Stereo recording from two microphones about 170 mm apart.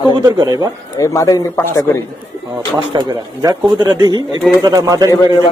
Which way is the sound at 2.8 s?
25° right (ahead or behind).